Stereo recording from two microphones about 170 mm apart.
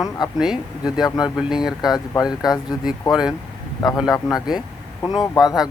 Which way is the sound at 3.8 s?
20° left (ahead or behind).